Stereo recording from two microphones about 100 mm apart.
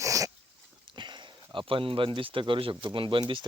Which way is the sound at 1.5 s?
65° right (ahead or behind).